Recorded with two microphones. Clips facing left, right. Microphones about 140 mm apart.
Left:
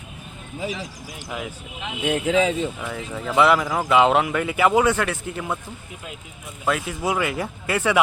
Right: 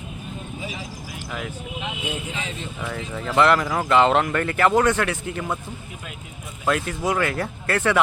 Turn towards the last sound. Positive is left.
turn(degrees=5)  # may be behind; listen again after turning